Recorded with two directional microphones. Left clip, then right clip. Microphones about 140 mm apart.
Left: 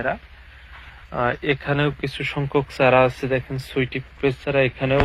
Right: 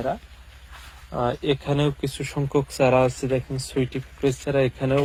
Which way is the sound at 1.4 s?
45° right (ahead or behind).